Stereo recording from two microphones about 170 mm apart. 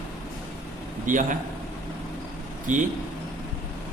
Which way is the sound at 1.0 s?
50° right (ahead or behind).